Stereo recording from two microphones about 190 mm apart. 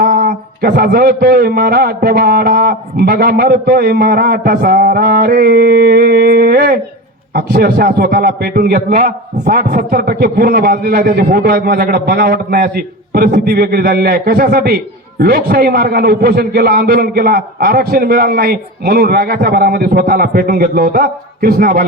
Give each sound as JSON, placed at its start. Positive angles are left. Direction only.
{"t": 0.2, "sound": "a man's voice", "side_deg": -60}